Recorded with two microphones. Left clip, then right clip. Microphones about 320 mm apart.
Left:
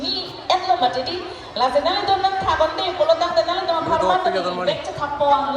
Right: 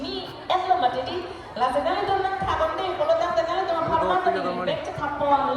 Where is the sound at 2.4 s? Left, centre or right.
Left.